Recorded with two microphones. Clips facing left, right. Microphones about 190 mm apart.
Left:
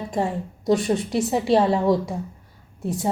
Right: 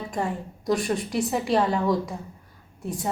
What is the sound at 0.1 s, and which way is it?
A woman's voice, 25° left (ahead or behind).